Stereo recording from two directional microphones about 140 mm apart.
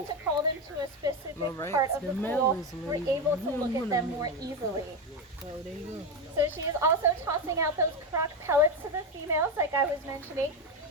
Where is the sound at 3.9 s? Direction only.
25° right (ahead or behind).